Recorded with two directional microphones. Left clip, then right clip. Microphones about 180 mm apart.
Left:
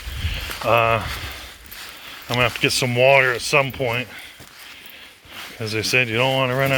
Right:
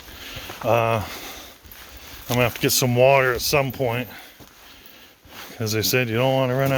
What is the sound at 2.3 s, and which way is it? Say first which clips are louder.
Speech: left 2 dB; 30° right (ahead or behind).